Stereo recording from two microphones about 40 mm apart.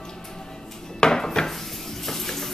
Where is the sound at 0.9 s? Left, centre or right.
Centre.